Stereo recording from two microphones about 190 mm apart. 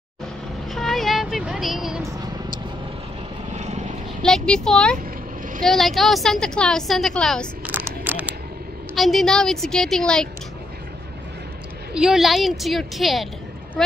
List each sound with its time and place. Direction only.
0.7 s vehicle: centre (ahead or behind)
3.5 s vehicle: 35° right (ahead or behind)
4.2 s a woman's voice: 5° left (ahead or behind)
7.6 s a sound: 10° right (ahead or behind)
8.9 s a woman's voice: centre (ahead or behind)
11.9 s a woman's voice: 5° right (ahead or behind)